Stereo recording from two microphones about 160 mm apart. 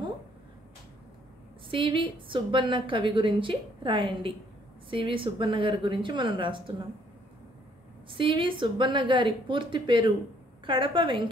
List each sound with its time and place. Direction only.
1.7 s a woman's voice: 30° right (ahead or behind)
8.1 s a woman's voice: 30° right (ahead or behind)